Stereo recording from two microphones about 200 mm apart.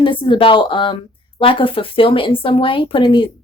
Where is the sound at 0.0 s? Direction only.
25° left (ahead or behind).